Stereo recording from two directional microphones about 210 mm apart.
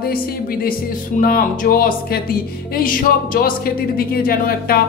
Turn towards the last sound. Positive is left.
turn(degrees=45)  # may be behind; listen again after turning